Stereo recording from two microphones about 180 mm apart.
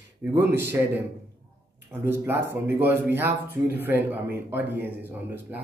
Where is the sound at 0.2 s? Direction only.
10° right (ahead or behind).